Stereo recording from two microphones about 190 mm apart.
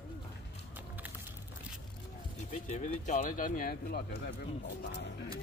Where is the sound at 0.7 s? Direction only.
10° right (ahead or behind).